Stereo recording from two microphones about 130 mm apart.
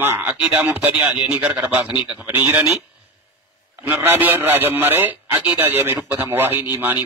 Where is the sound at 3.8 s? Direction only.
15° right (ahead or behind).